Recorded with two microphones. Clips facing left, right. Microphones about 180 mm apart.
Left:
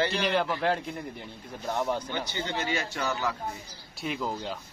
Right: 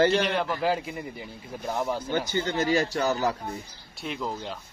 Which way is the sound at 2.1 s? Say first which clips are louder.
Right 6 dB; 45° right (ahead or behind).